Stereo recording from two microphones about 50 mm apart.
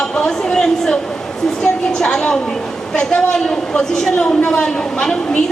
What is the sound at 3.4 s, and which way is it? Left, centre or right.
A man's voice, centre.